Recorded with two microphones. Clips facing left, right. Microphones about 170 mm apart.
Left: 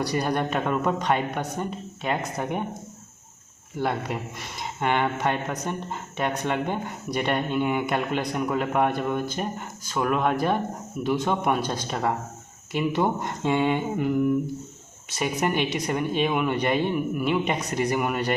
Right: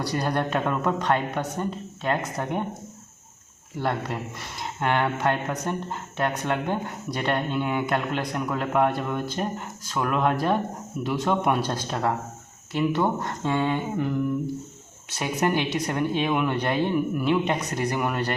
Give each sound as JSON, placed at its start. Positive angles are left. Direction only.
{"t": 0.0, "sound": "speech", "side_deg": 15}
{"t": 3.8, "sound": "speech", "side_deg": 10}
{"t": 12.7, "sound": "speech", "side_deg": 15}
{"t": 15.2, "sound": "speech", "side_deg": 10}